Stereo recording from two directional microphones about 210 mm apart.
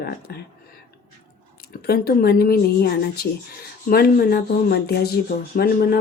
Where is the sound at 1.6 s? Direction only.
50° left (ahead or behind).